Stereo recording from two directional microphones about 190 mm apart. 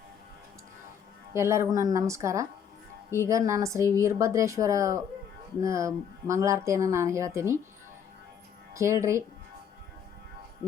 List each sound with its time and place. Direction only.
1.3 s speech: 15° right (ahead or behind)
8.7 s speech: 15° right (ahead or behind)